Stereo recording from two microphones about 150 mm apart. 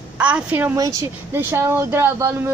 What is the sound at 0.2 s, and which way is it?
Speech, 10° right (ahead or behind).